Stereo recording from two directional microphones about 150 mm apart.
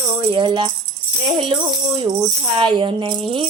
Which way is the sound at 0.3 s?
35° right (ahead or behind).